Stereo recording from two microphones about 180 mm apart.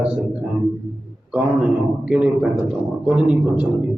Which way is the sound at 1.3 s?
5° right (ahead or behind).